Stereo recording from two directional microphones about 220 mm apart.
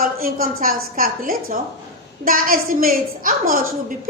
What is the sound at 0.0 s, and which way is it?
A woman's voice, 40° right (ahead or behind).